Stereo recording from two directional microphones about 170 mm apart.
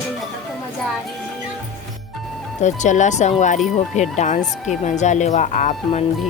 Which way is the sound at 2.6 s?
45° left (ahead or behind).